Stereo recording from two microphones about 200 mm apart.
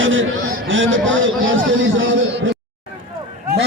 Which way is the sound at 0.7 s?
75° right (ahead or behind).